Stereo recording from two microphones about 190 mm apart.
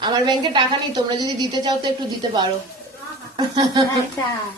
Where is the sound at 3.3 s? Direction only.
25° right (ahead or behind).